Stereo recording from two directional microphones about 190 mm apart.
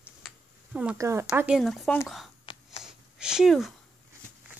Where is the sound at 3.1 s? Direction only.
5° right (ahead or behind).